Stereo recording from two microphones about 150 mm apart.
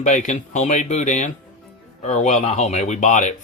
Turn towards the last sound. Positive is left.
turn(degrees=55)  # may be behind; listen again after turning